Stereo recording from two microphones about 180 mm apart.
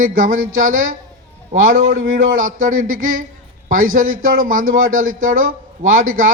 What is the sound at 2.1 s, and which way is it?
A man's voice, 50° right (ahead or behind).